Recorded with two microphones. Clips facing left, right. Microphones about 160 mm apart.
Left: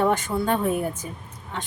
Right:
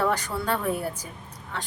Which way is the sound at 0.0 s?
20° left (ahead or behind).